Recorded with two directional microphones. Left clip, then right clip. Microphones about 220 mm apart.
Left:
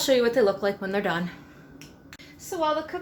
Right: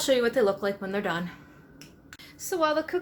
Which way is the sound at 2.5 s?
35° right (ahead or behind).